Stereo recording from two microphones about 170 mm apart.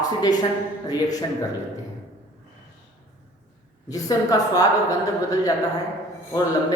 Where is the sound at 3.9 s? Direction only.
20° left (ahead or behind).